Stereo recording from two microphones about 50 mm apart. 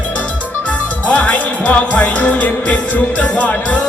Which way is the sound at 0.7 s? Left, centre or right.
Left.